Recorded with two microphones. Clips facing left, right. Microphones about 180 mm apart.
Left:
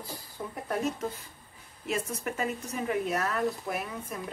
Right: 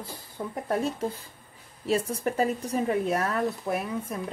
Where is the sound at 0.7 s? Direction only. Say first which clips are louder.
Right 3 dB; 30° right (ahead or behind).